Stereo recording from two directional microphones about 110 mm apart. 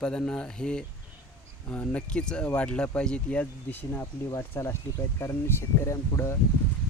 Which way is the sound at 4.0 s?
25° left (ahead or behind).